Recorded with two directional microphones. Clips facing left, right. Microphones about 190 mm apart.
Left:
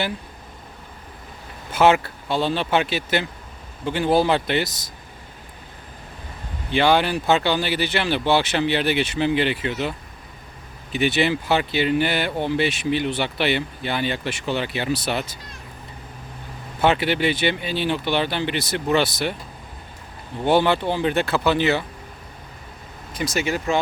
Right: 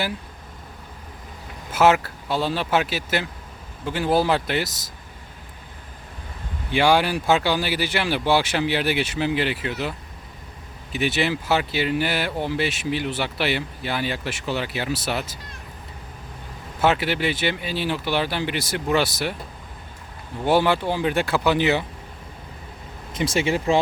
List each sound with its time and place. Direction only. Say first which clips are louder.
1.7 s speech: left 1 dB; 5° right (ahead or behind)
6.7 s speech: even; 10° right (ahead or behind)
10.9 s speech: left 3 dB; centre (ahead or behind)
16.8 s speech: left 2 dB; 5° right (ahead or behind)
20.4 s speech: left 1 dB; 5° right (ahead or behind)
23.1 s speech: right 2 dB; 30° right (ahead or behind)